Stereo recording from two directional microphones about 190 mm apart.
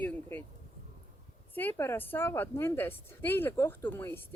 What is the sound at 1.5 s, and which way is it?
Speech, 10° left (ahead or behind).